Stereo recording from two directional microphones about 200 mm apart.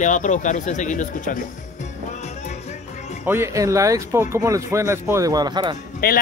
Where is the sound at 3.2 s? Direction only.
15° right (ahead or behind).